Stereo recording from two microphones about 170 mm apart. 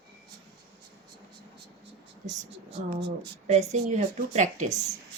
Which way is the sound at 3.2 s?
40° right (ahead or behind).